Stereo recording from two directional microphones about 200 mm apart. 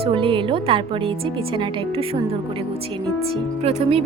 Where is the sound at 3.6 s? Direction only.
30° right (ahead or behind).